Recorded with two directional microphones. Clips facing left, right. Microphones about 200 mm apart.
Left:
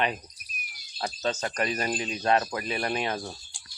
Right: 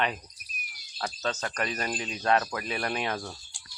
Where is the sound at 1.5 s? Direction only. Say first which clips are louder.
Left 3 dB; 5° left (ahead or behind).